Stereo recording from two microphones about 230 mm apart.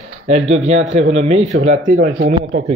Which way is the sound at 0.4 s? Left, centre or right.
Right.